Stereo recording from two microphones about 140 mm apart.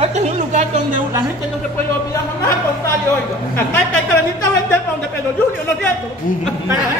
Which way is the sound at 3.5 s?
15° left (ahead or behind).